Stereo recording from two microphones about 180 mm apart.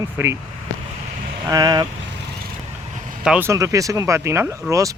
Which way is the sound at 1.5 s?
20° right (ahead or behind).